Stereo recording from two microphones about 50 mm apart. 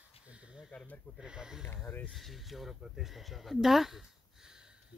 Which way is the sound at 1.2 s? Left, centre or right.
Centre.